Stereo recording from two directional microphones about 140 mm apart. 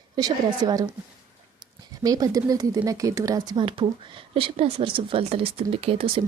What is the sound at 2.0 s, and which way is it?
Speech, 25° right (ahead or behind).